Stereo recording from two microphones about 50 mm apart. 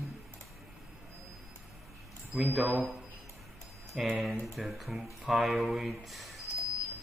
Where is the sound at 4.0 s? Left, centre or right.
Centre.